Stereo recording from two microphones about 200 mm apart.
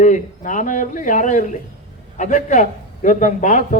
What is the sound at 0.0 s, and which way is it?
A man's voice, 40° left (ahead or behind).